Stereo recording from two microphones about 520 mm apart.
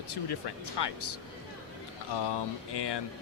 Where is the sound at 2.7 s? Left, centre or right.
Left.